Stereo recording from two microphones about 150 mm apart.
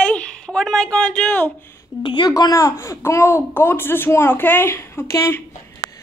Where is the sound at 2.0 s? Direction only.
30° left (ahead or behind).